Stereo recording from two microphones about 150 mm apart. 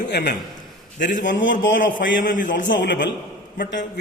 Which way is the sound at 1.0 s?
60° left (ahead or behind).